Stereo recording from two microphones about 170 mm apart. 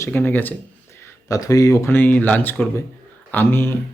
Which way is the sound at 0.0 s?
10° left (ahead or behind).